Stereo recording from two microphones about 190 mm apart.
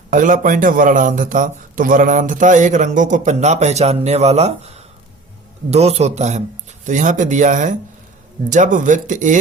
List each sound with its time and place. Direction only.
0.1 s a man's voice: 45° right (ahead or behind)